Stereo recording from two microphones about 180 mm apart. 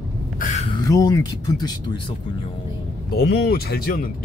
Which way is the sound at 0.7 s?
20° left (ahead or behind).